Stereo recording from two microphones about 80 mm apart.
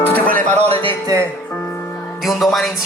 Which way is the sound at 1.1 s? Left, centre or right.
Right.